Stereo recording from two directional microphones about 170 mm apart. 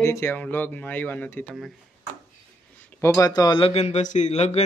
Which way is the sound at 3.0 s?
20° left (ahead or behind).